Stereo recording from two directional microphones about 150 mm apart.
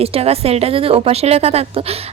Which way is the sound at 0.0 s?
40° right (ahead or behind).